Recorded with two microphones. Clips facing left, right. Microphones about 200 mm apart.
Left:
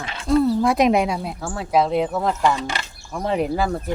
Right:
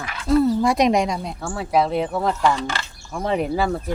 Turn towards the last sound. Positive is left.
turn(degrees=0)  # may be behind; listen again after turning